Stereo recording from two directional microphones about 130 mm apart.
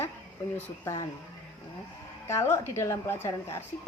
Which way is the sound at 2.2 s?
20° left (ahead or behind).